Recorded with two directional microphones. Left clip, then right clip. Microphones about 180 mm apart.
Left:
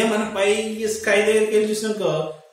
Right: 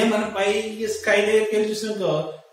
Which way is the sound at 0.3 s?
20° left (ahead or behind).